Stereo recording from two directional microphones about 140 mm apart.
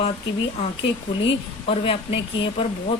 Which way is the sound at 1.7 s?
40° left (ahead or behind).